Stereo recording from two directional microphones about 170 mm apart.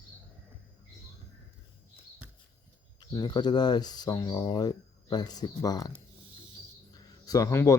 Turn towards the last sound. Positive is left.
turn(degrees=20)  # may be behind; listen again after turning